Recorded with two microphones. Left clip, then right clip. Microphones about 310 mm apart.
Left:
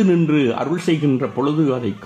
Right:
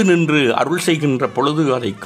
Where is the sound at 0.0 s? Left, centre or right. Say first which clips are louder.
Right 3 dB; right.